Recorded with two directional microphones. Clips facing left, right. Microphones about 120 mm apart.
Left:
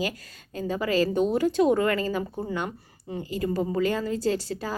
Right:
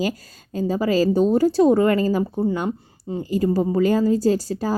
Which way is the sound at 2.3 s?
25° right (ahead or behind).